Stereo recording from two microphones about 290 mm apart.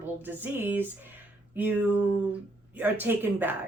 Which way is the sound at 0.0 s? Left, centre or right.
Centre.